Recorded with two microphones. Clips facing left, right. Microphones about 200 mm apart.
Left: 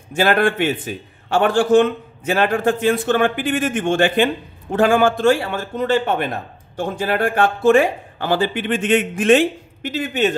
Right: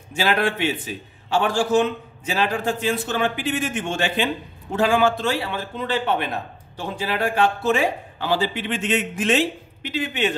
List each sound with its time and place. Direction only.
0.1 s a man's voice: 50° left (ahead or behind)